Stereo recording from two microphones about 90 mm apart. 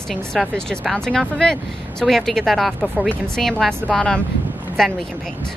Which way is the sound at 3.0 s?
15° left (ahead or behind).